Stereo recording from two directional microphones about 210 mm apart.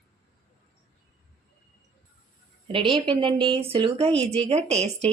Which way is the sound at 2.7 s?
25° right (ahead or behind).